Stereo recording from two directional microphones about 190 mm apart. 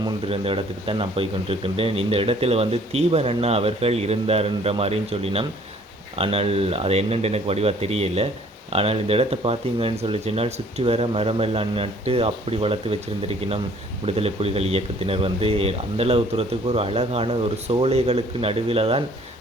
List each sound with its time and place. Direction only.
0.0 s speech: 30° right (ahead or behind)